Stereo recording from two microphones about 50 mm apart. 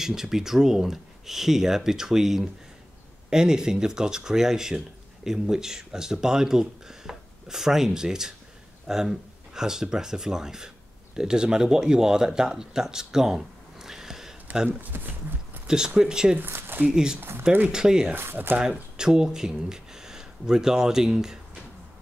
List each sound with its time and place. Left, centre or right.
0.0 s speech: centre
14.7 s speech: right
15.6 s a sound: centre
16.0 s speech: centre
16.3 s speech: right
16.8 s speech: centre
18.1 s speech: right
18.6 s speech: centre